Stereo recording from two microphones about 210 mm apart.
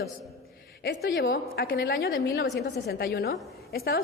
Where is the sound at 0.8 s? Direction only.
55° left (ahead or behind).